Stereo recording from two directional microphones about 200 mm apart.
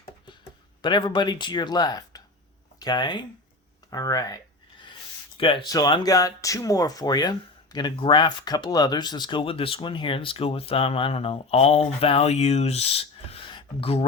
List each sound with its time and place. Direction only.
0.8 s speech: 25° left (ahead or behind)
5.4 s speech: 25° left (ahead or behind)